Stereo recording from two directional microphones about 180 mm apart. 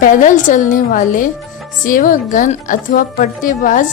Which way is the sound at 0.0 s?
45° left (ahead or behind).